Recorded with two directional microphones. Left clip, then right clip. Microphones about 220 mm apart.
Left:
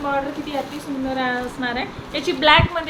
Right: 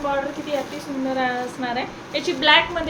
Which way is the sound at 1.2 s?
10° left (ahead or behind).